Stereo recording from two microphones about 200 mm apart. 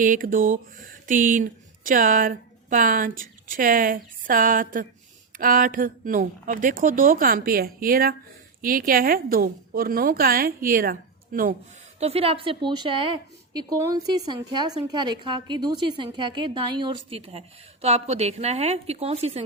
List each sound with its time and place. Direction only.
0.0 s speech: 40° right (ahead or behind)
11.9 s a woman's voice: 30° right (ahead or behind)